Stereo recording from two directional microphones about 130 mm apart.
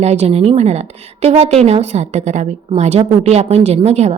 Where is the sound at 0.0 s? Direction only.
55° right (ahead or behind).